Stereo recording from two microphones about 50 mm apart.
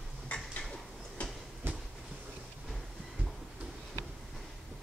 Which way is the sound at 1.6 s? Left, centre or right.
Right.